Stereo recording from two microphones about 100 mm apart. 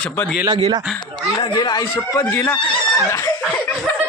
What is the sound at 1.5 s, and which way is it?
Speech, 40° left (ahead or behind).